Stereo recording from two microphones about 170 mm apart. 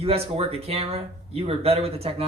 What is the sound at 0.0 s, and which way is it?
Speech, 35° right (ahead or behind).